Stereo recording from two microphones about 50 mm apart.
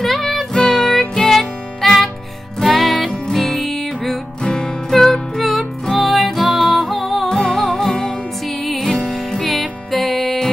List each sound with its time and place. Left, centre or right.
0.0 s music: centre
4.4 s music: centre
4.9 s music: centre
7.2 s music: centre
8.6 s music: centre